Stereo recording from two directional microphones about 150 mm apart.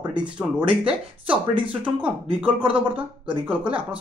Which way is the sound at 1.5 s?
35° right (ahead or behind).